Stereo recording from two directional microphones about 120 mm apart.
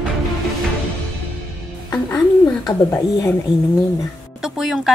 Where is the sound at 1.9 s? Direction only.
25° left (ahead or behind).